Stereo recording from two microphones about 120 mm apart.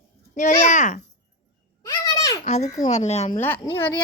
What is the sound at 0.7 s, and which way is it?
Speech, 90° left.